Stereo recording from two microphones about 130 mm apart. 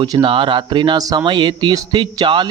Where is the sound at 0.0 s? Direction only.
40° right (ahead or behind).